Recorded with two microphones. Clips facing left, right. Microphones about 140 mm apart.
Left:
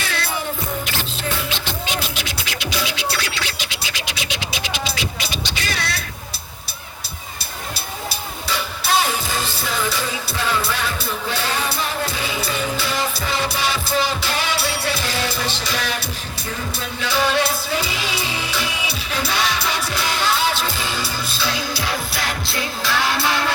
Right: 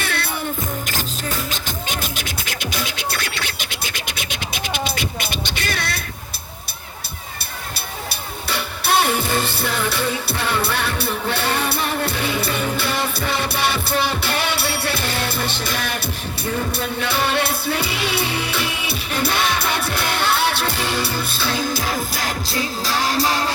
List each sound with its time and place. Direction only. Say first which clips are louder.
0.0 s music: right 1 dB; 60° right (ahead or behind)
0.9 s music: even; 45° right (ahead or behind)
8.1 s music: even; 60° right (ahead or behind); by 23.5 s 40° right (ahead or behind)